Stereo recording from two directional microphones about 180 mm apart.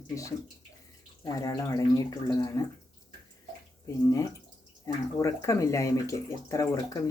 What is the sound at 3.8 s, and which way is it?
Speech, 20° left (ahead or behind).